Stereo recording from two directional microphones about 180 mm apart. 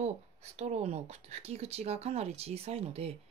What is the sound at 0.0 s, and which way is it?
Speech, 40° right (ahead or behind).